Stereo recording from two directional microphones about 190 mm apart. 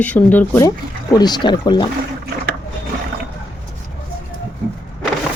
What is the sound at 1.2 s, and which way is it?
Speech, 20° left (ahead or behind).